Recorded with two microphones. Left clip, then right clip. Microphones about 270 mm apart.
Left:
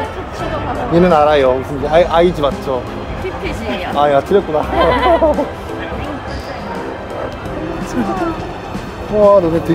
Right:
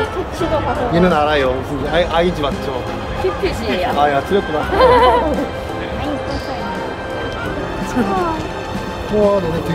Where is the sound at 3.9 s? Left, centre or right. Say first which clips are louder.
Left 5 dB; left.